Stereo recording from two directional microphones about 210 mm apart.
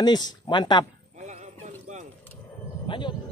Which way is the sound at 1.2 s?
35° right (ahead or behind).